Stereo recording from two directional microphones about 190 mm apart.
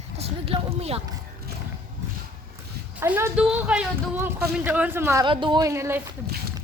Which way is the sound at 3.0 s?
10° right (ahead or behind).